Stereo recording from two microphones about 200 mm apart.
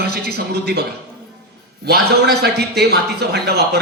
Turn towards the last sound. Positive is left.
turn(degrees=-55)  # may be behind; listen again after turning